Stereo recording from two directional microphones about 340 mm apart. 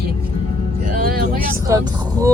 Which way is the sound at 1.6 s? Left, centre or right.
Centre.